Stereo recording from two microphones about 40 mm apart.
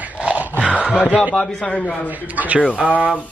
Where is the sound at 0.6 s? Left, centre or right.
Left.